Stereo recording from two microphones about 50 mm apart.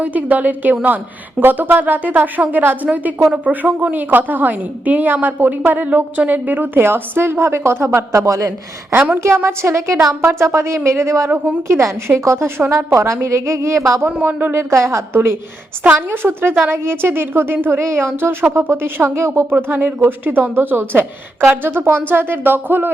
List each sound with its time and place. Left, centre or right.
0.0 s a woman's voice: right
9.0 s a woman's voice: right
9.2 s a woman's voice: right
10.8 s a woman's voice: right
12.7 s a woman's voice: right
13.2 s a woman's voice: right
14.2 s a woman's voice: right
14.7 s a woman's voice: right
15.1 s a woman's voice: right
17.7 s a woman's voice: right
19.5 s a woman's voice: right